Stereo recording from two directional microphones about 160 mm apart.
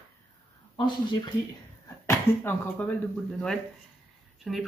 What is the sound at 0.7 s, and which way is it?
Speech, 30° left (ahead or behind).